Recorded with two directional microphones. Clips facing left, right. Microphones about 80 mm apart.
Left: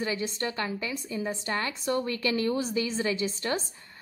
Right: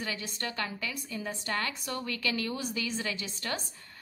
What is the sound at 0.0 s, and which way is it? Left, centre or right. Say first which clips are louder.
A woman's voice: left 6 dB; left.